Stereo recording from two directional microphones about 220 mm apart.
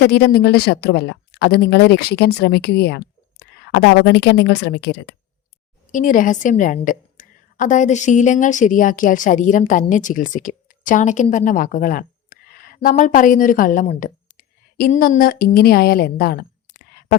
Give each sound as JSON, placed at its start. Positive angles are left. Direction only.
{"t": 0.0, "sound": "speech", "side_deg": 45}
{"t": 5.9, "sound": "a woman's voice", "side_deg": 35}